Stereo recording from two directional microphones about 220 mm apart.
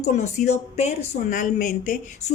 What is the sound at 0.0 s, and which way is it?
Speech, 30° left (ahead or behind).